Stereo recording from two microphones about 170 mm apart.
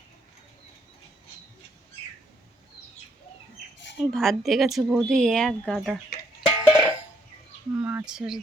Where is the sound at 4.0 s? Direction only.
Centre (ahead or behind).